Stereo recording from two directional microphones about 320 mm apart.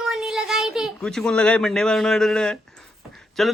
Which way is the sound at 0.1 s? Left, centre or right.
Centre.